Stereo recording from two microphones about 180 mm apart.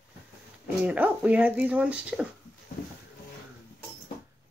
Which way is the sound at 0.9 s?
5° right (ahead or behind).